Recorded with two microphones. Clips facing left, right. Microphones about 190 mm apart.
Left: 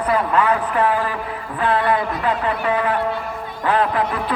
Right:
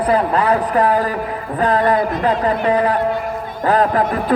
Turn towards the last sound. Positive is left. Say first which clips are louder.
# right 4 dB
turn(degrees=-40)  # may be behind; listen again after turning